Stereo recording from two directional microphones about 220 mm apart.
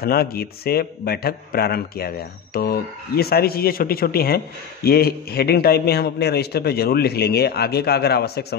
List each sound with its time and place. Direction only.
0.0 s a man's voice: 45° left (ahead or behind)